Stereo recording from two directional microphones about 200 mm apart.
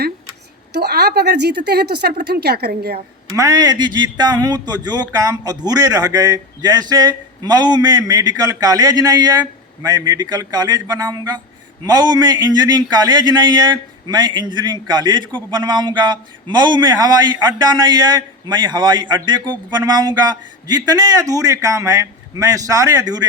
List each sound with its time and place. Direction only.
0.7 s a woman's voice: 50° right (ahead or behind)
3.2 s a man's voice: 15° right (ahead or behind)